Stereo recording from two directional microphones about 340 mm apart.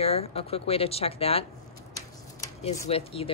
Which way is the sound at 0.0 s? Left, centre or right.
Centre.